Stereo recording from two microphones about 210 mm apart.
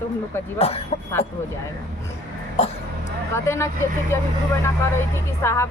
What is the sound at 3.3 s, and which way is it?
Speech, 15° left (ahead or behind).